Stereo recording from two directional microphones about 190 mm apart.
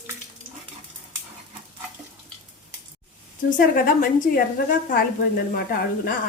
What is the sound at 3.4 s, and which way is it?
A woman's voice, 45° left (ahead or behind).